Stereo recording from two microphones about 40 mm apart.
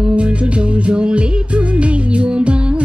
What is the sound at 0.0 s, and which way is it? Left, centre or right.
Music, right.